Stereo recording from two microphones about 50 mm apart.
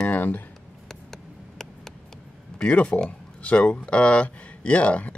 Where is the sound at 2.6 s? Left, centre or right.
Left.